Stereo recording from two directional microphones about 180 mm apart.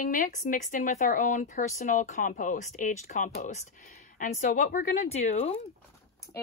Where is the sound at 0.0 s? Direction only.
45° left (ahead or behind).